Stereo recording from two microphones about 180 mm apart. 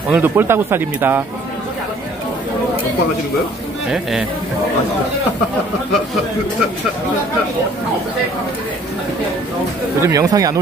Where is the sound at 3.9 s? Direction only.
5° right (ahead or behind).